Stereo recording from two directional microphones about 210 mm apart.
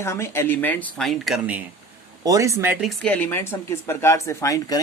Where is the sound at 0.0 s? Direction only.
10° left (ahead or behind); by 1.6 s 5° right (ahead or behind).